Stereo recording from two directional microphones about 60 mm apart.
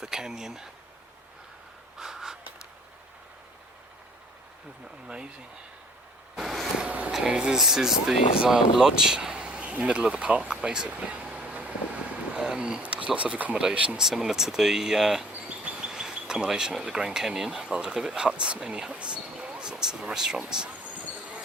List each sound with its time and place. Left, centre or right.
0.0 s speech: centre
2.0 s a sound: centre
5.0 s speech: centre
6.3 s vehicle: centre
6.8 s a sound: right
7.1 s speech: centre
9.9 s vehicle: centre
12.8 s speech: centre
14.0 s speech: centre
15.3 s insect: right
15.9 s speech: centre